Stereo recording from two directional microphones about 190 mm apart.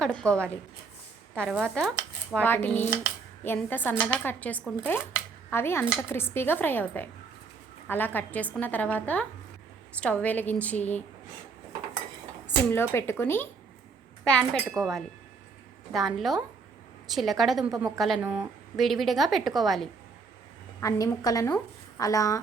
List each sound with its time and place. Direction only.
0.0 s a woman's voice: 5° left (ahead or behind)
2.3 s a woman's voice: 10° left (ahead or behind)
12.5 s a woman's voice: 10° left (ahead or behind)
18.2 s speech: 10° right (ahead or behind)
18.8 s a woman's voice: centre (ahead or behind)
20.8 s a woman's voice: 20° left (ahead or behind)